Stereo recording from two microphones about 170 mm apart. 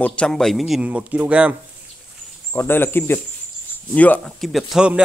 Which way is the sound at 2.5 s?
10° left (ahead or behind).